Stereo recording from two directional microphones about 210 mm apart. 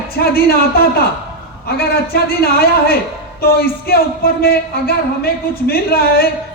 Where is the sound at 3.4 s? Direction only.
45° left (ahead or behind).